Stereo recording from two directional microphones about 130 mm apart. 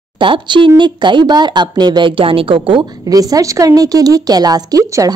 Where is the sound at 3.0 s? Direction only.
30° right (ahead or behind).